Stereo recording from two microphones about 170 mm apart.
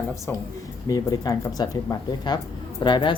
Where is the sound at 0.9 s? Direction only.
20° left (ahead or behind).